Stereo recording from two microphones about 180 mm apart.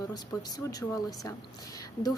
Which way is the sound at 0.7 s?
20° left (ahead or behind).